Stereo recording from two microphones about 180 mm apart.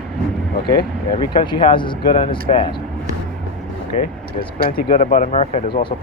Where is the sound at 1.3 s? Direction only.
25° left (ahead or behind).